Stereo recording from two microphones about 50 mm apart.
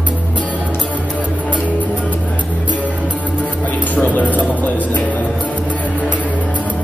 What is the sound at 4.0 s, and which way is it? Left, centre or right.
Speech, left.